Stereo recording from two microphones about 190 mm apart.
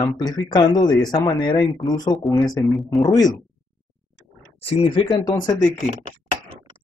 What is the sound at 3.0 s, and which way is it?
Speech, 20° left (ahead or behind).